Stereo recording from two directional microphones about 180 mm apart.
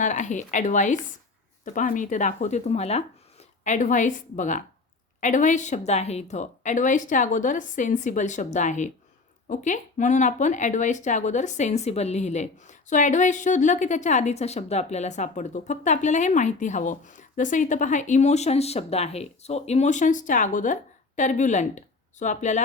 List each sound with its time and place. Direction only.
0.0 s a woman's voice: 45° left (ahead or behind)